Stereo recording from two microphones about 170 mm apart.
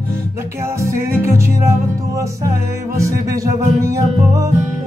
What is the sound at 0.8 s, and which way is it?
Music, 15° right (ahead or behind).